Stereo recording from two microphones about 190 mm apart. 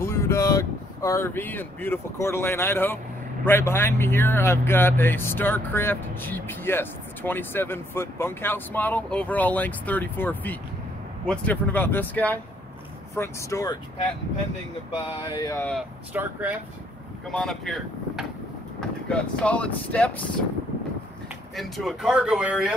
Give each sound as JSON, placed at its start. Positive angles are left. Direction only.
{"t": 0.0, "sound": "speech", "side_deg": 15}
{"t": 15.1, "sound": "speech", "side_deg": 20}
{"t": 16.1, "sound": "speech", "side_deg": -10}
{"t": 17.3, "sound": "speech", "side_deg": 5}
{"t": 21.5, "sound": "speech", "side_deg": 0}